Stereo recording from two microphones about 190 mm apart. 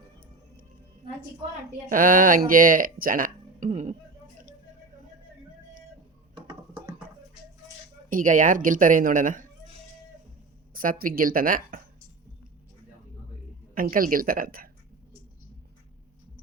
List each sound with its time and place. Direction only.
1.9 s speech: 45° right (ahead or behind)
6.3 s music: 20° right (ahead or behind)
8.1 s speech: 45° right (ahead or behind)
10.8 s speech: 50° right (ahead or behind)
13.7 s speech: 50° right (ahead or behind)